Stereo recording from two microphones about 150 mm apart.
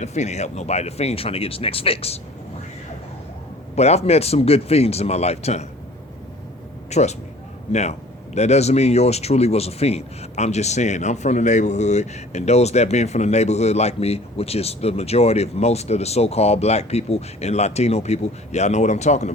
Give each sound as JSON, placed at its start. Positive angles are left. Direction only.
{"t": 0.0, "sound": "a man's voice", "side_deg": 45}
{"t": 3.8, "sound": "a man's voice", "side_deg": 45}
{"t": 6.9, "sound": "a man's voice", "side_deg": 50}